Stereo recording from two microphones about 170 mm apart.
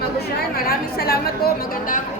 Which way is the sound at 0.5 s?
60° left (ahead or behind).